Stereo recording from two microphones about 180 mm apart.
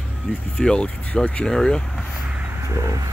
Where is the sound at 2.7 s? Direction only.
15° right (ahead or behind).